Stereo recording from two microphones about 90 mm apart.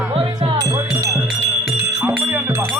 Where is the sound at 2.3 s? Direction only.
30° right (ahead or behind).